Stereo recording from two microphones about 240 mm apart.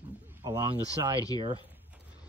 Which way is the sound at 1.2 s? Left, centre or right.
Centre.